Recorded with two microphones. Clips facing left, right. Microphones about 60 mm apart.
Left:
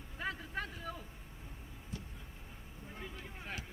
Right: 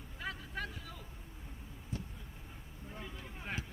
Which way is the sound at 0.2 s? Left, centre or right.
Left.